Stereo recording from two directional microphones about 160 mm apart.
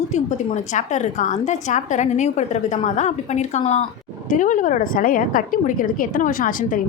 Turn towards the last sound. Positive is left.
turn(degrees=60)  # may be behind; listen again after turning